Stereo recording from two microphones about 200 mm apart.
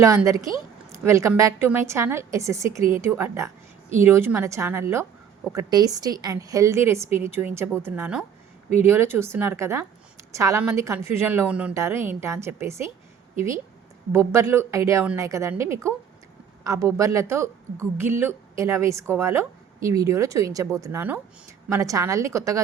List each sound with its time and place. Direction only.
0.0 s a woman's voice: 15° right (ahead or behind)
14.1 s speech: 15° right (ahead or behind)